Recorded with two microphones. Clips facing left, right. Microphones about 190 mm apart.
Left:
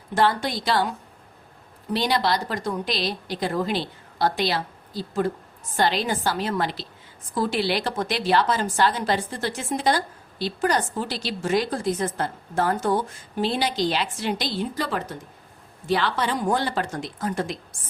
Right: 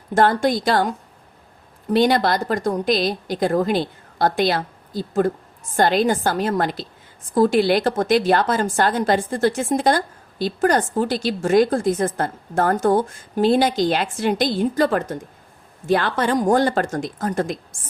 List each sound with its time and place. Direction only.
0.1 s a woman's voice: 45° right (ahead or behind)